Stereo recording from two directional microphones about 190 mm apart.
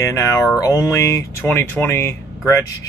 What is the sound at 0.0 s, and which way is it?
Speech, 15° left (ahead or behind).